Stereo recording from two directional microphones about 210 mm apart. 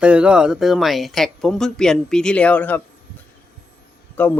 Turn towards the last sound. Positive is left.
turn(degrees=10)  # may be behind; listen again after turning